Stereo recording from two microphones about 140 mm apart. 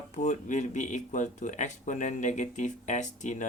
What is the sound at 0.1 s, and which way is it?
Speech, 60° left (ahead or behind).